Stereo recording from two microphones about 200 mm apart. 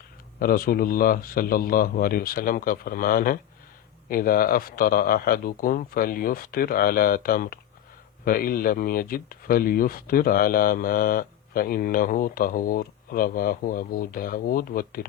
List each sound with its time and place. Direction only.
0.3 s speech: 45° left (ahead or behind)